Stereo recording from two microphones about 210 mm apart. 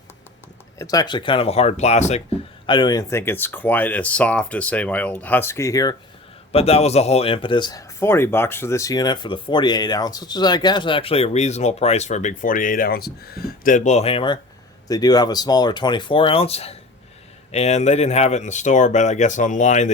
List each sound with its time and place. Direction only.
0.8 s speech: 15° left (ahead or behind); by 2.2 s 30° left (ahead or behind)
2.6 s speech: 20° left (ahead or behind)
6.5 s speech: 30° left (ahead or behind)